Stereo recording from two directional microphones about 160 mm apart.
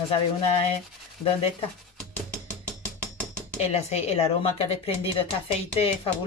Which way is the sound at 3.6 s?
40° left (ahead or behind).